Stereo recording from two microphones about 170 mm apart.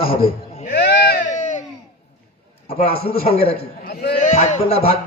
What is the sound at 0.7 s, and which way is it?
Speech, 70° left (ahead or behind).